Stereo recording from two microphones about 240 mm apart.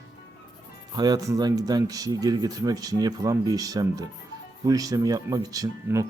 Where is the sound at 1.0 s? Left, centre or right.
Centre.